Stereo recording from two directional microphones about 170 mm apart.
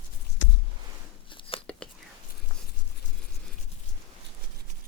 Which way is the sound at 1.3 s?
30° left (ahead or behind).